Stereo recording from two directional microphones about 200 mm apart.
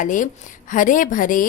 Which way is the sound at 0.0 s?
40° left (ahead or behind).